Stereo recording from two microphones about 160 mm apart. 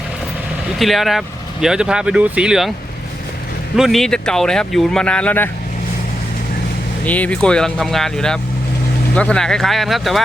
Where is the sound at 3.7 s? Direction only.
Centre (ahead or behind).